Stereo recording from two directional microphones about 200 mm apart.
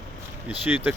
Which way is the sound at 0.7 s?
10° right (ahead or behind).